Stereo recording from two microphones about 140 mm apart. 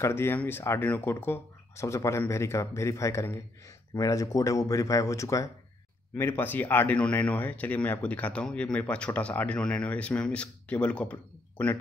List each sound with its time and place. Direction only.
0.0 s speech: 15° left (ahead or behind)